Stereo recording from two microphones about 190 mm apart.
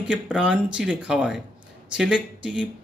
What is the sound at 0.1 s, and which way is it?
Speech, 5° right (ahead or behind).